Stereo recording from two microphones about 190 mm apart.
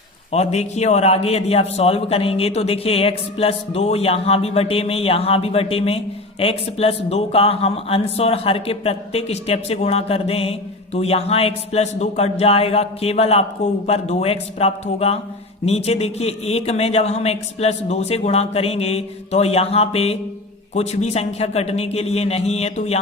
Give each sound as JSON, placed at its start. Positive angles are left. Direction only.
{"t": 0.3, "sound": "a man's voice", "side_deg": 35}